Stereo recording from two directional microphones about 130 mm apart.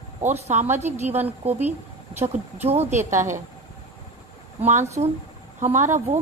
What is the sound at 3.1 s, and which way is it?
Speech, 20° right (ahead or behind).